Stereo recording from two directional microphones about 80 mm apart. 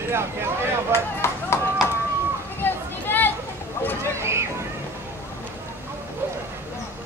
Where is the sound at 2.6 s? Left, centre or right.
Left.